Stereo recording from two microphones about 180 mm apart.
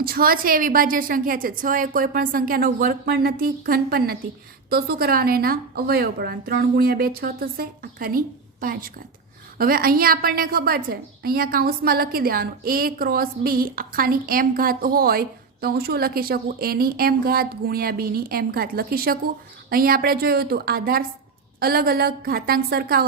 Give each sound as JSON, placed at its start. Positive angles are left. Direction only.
{"t": 0.0, "sound": "a woman's voice", "side_deg": -55}